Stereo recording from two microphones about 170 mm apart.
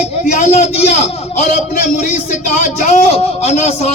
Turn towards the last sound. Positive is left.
turn(degrees=40)  # may be behind; listen again after turning